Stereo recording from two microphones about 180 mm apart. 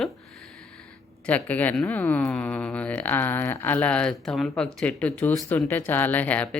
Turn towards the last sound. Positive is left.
turn(degrees=10)  # may be behind; listen again after turning